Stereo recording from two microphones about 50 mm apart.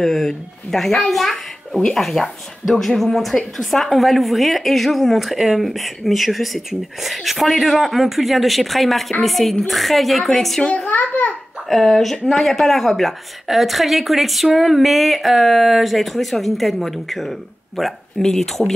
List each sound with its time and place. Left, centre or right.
0.0 s a woman's voice: centre
10.6 s a child's voice: left
11.7 s a woman's voice: centre